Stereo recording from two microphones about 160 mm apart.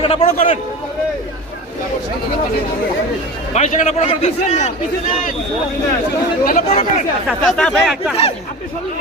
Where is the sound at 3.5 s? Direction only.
50° left (ahead or behind).